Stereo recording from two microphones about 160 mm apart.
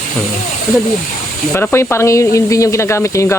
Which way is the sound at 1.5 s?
15° left (ahead or behind).